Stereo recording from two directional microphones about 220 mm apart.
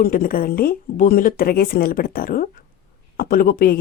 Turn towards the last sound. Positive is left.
turn(degrees=40)  # may be behind; listen again after turning